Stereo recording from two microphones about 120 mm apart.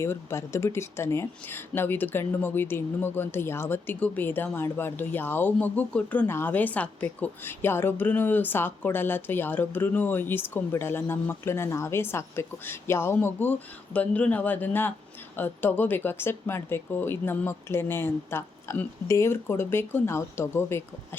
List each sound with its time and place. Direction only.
0.0 s speech: 20° left (ahead or behind)